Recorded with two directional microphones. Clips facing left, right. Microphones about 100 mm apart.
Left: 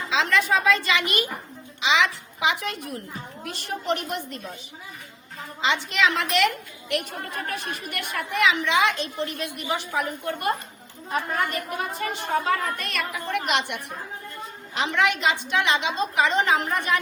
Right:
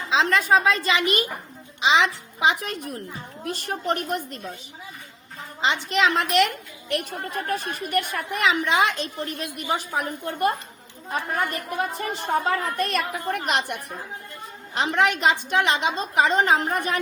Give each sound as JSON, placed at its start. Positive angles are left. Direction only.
{"t": 0.1, "sound": "a woman's voice", "side_deg": -35}
{"t": 5.6, "sound": "a woman's voice", "side_deg": -35}
{"t": 7.5, "sound": "a woman's voice", "side_deg": -40}
{"t": 11.9, "sound": "a woman's voice", "side_deg": -35}
{"t": 14.8, "sound": "a woman's voice", "side_deg": -40}